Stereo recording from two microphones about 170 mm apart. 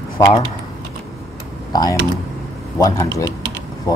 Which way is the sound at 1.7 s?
20° left (ahead or behind).